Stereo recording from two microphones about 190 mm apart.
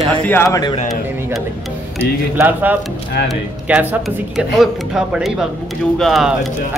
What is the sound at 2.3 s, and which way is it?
A man's voice, 10° right (ahead or behind).